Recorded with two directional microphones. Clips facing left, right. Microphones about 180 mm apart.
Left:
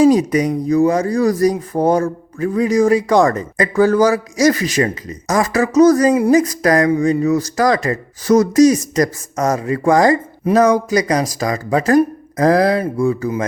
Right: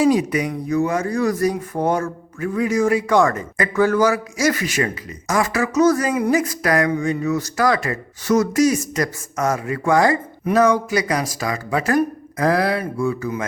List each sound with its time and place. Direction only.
0.0 s speech: 40° left (ahead or behind)